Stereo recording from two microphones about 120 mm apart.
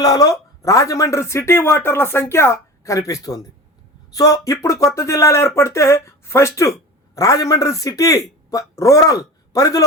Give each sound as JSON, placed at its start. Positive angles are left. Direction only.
{"t": 0.0, "sound": "speech", "side_deg": 30}